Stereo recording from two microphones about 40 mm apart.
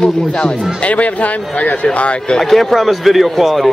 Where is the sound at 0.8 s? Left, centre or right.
Left.